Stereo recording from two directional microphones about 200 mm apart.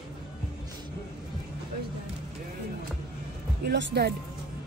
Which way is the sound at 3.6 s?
55° right (ahead or behind).